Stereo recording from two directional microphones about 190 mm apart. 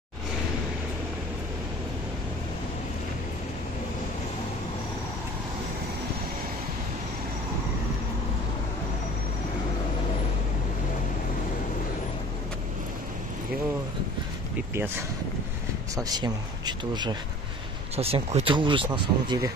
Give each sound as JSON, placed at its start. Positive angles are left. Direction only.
{"t": 14.7, "sound": "speech", "side_deg": -15}